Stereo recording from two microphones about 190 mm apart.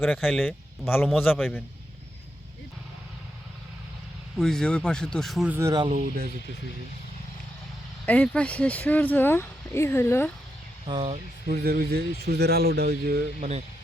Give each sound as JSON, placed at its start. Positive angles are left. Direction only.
{"t": 0.2, "sound": "speech", "side_deg": 0}
{"t": 0.9, "sound": "speech", "side_deg": 10}
{"t": 1.3, "sound": "speech", "side_deg": -5}
{"t": 4.4, "sound": "speech", "side_deg": 5}
{"t": 5.5, "sound": "speech", "side_deg": -20}
{"t": 8.0, "sound": "speech", "side_deg": 10}
{"t": 10.8, "sound": "speech", "side_deg": -30}
{"t": 11.4, "sound": "speech", "side_deg": -55}